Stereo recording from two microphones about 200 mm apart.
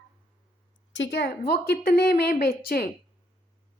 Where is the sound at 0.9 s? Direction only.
60° left (ahead or behind).